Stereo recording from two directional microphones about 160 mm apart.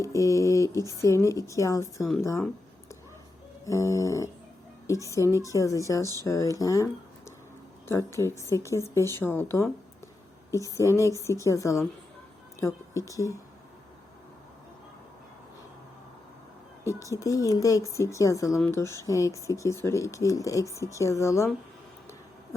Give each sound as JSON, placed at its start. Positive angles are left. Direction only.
{"t": 0.0, "sound": "speech", "side_deg": 20}
{"t": 3.7, "sound": "speech", "side_deg": 20}
{"t": 7.9, "sound": "speech", "side_deg": 15}
{"t": 12.5, "sound": "music", "side_deg": 20}
{"t": 13.1, "sound": "speech", "side_deg": 20}
{"t": 16.8, "sound": "speech", "side_deg": 20}